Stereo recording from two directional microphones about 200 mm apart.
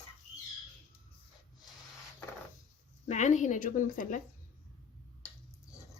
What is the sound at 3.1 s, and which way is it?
A woman's voice, 35° left (ahead or behind).